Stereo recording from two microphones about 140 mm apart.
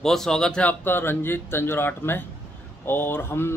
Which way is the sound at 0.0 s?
5° left (ahead or behind).